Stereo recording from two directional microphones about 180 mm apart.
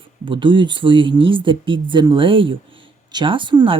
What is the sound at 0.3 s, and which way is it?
Speech, 25° right (ahead or behind).